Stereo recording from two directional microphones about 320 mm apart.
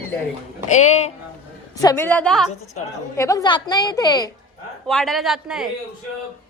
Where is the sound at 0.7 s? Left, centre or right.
Left.